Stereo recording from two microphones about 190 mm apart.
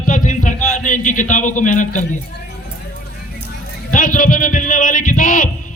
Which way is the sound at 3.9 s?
45° left (ahead or behind).